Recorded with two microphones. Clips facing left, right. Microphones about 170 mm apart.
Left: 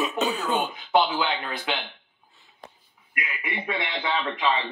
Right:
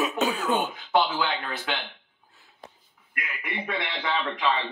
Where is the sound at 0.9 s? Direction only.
20° left (ahead or behind).